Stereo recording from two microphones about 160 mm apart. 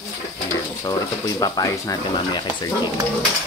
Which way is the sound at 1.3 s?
20° left (ahead or behind).